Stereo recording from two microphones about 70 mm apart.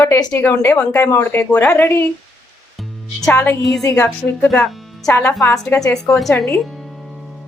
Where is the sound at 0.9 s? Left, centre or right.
Left.